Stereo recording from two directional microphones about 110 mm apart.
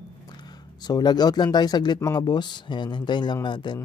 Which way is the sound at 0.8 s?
40° left (ahead or behind).